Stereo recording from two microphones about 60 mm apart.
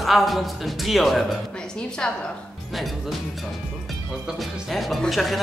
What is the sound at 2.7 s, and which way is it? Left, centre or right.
Speech, centre.